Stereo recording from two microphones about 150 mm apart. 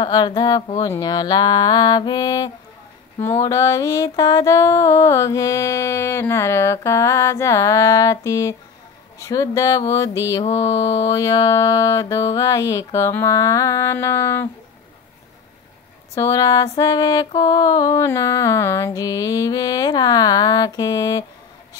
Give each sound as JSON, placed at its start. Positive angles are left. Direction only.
{"t": 0.0, "sound": "music", "side_deg": 30}
{"t": 16.2, "sound": "music", "side_deg": 20}